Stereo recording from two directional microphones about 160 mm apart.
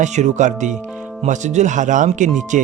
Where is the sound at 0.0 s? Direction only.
45° right (ahead or behind).